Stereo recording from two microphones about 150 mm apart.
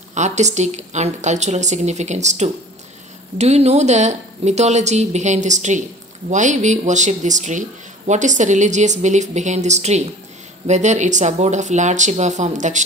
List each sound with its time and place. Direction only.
0.1 s a woman's voice: 50° right (ahead or behind)